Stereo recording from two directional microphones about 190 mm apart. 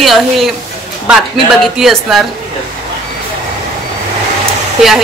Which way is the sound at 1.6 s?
Centre (ahead or behind).